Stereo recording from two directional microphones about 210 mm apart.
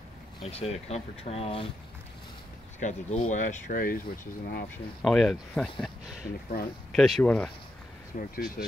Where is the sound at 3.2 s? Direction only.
35° left (ahead or behind).